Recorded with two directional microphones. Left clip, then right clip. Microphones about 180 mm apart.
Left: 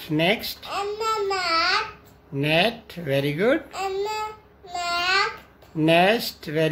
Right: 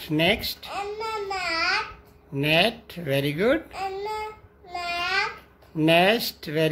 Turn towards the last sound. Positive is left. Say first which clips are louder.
# left 1 dB
turn(degrees=-15)  # may be behind; listen again after turning